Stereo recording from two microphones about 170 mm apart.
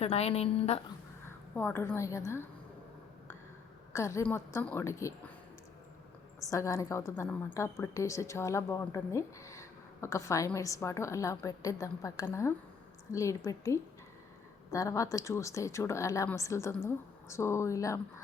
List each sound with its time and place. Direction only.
0.0 s a woman's voice: 35° left (ahead or behind)
1.5 s a woman's voice: 10° left (ahead or behind)
3.9 s a woman's voice: 15° left (ahead or behind)
6.5 s a woman's voice: 20° left (ahead or behind)